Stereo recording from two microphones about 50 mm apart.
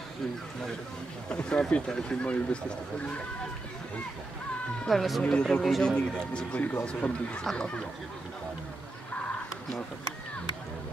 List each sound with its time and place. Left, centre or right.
1.3 s speech: centre
4.8 s speech: centre
5.2 s speech: centre